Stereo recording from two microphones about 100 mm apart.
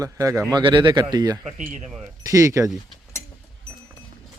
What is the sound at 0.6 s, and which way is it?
Speech, 55° right (ahead or behind).